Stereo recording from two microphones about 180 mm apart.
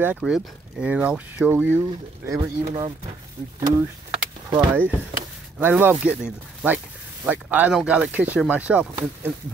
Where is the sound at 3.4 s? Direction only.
35° right (ahead or behind).